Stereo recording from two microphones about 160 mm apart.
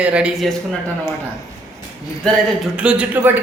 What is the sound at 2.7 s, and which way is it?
Speech, 5° right (ahead or behind).